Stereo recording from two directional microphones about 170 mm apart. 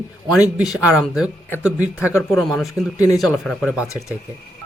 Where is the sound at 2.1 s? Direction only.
15° left (ahead or behind).